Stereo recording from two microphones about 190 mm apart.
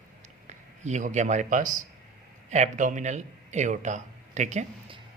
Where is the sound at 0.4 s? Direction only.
40° right (ahead or behind).